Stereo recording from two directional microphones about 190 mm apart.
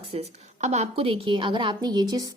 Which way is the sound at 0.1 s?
35° right (ahead or behind).